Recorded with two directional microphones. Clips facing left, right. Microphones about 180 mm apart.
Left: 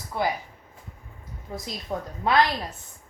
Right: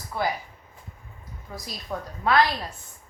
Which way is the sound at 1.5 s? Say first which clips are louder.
Left 2 dB; 20° left (ahead or behind).